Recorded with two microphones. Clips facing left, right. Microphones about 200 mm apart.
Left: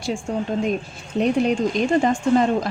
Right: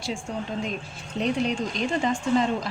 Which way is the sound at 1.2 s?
50° left (ahead or behind).